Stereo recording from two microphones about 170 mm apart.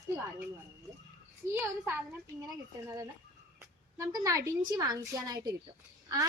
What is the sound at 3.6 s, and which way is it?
A woman's voice, 20° right (ahead or behind).